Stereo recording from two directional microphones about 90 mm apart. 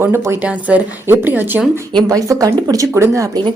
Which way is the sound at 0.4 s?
15° right (ahead or behind).